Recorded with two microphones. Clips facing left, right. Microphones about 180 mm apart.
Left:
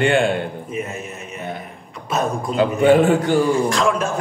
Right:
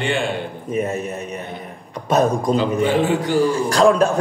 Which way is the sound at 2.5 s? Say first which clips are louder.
Left 8 dB; 55° left (ahead or behind).